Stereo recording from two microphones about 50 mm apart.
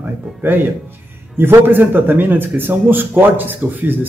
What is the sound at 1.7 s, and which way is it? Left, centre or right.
A man's voice, right.